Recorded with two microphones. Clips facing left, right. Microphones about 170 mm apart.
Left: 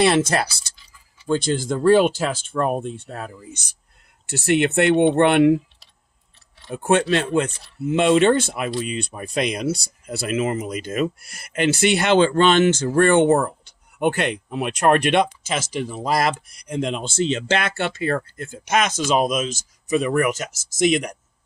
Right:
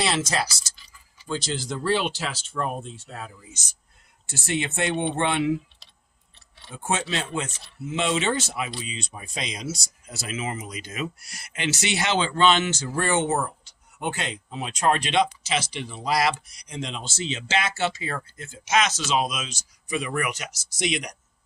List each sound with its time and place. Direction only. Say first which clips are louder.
0.0 s speech: left 8 dB; 55° left (ahead or behind)
6.7 s speech: left 10 dB; 60° left (ahead or behind)